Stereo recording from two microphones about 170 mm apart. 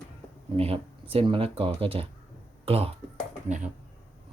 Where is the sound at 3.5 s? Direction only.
45° right (ahead or behind).